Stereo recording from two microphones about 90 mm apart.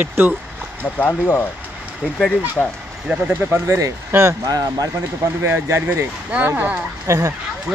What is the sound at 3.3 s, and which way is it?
Speech, 20° right (ahead or behind).